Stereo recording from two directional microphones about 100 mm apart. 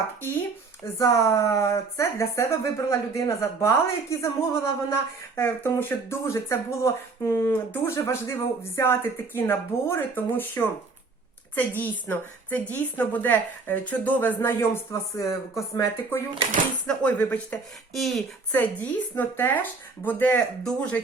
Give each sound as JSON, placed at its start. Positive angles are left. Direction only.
{"t": 0.9, "sound": "a woman's voice", "side_deg": 30}
{"t": 16.8, "sound": "speech", "side_deg": 15}
{"t": 17.9, "sound": "speech", "side_deg": 0}
{"t": 18.5, "sound": "speech", "side_deg": 15}